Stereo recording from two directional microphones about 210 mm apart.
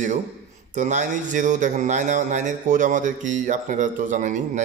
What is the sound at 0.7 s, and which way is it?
A man's voice, 35° right (ahead or behind).